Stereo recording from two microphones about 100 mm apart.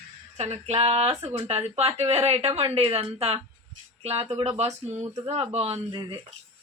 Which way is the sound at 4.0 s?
90° right.